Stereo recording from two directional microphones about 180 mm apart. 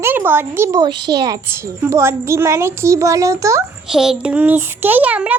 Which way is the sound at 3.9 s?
5° right (ahead or behind).